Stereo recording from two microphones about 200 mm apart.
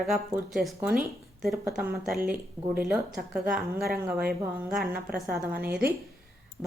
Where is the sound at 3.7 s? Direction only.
50° right (ahead or behind).